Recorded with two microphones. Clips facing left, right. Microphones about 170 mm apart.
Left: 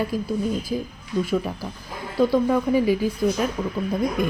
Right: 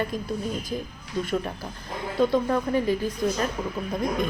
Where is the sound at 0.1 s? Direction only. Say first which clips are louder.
Left 5 dB; 5° left (ahead or behind).